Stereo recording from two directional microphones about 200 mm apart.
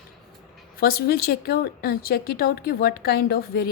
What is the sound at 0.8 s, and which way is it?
A woman's voice, 50° left (ahead or behind).